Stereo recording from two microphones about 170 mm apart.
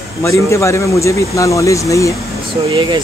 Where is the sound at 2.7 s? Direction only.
30° right (ahead or behind).